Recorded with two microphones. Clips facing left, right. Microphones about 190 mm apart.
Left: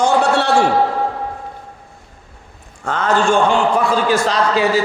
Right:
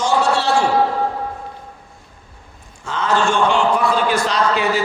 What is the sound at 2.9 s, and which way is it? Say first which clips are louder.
Speech: left 3 dB; 50° left (ahead or behind).